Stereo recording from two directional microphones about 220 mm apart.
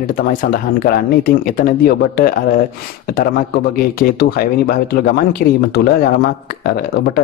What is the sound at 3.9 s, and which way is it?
Speech, 40° left (ahead or behind).